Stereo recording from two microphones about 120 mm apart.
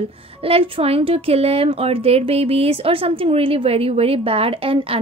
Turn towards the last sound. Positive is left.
turn(degrees=-50)  # may be behind; listen again after turning